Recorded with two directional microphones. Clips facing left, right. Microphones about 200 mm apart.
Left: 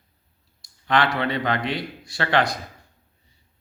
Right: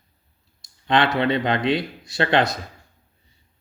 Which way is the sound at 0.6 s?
20° right (ahead or behind).